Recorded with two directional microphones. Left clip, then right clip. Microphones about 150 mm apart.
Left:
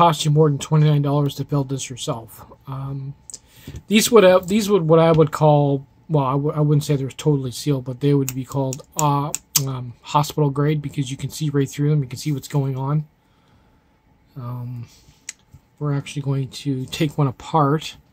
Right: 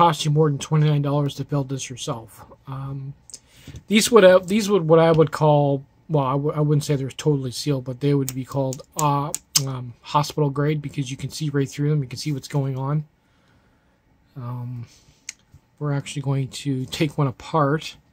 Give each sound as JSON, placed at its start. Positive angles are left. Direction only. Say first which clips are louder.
{"t": 0.0, "sound": "speech", "louder": "left 2 dB", "side_deg": -10}
{"t": 14.3, "sound": "speech", "louder": "left 1 dB", "side_deg": -20}
{"t": 15.8, "sound": "speech", "louder": "left 1 dB", "side_deg": -25}